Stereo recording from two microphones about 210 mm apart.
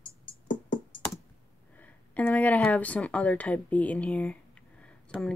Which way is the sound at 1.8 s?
5° left (ahead or behind).